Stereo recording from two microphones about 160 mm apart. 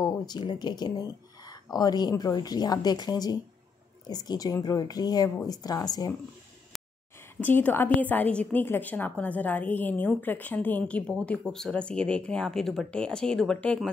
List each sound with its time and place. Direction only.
0.0 s speech: 25° left (ahead or behind)
7.3 s a woman's voice: 10° left (ahead or behind)